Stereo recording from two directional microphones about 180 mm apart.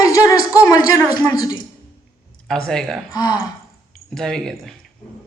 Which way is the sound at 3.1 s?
20° left (ahead or behind).